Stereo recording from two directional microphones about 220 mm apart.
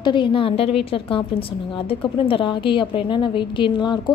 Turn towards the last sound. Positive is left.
turn(degrees=20)  # may be behind; listen again after turning